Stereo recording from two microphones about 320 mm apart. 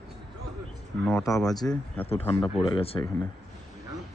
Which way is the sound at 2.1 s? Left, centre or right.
Centre.